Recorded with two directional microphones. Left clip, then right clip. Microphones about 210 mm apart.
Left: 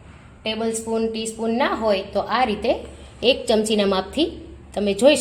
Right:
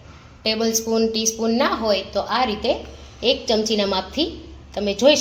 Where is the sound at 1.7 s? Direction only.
15° left (ahead or behind).